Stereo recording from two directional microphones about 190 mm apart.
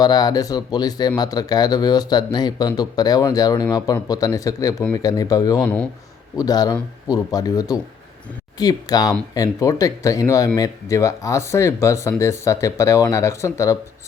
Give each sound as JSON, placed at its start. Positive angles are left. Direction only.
{"t": 0.0, "sound": "speech", "side_deg": 20}
{"t": 5.6, "sound": "speech", "side_deg": 5}
{"t": 6.3, "sound": "speech", "side_deg": 20}